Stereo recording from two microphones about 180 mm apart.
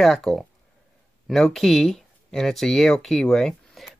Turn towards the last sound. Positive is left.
turn(degrees=0)  # may be behind; listen again after turning